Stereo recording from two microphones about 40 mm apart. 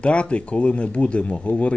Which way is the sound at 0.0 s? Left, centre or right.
Left.